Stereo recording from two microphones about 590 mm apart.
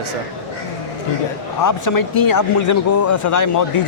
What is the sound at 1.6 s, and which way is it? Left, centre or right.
Speech, left.